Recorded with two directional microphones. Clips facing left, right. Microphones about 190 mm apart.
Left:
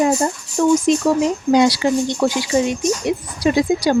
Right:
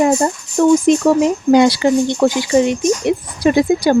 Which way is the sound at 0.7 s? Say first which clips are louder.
Right 3 dB; 55° right (ahead or behind).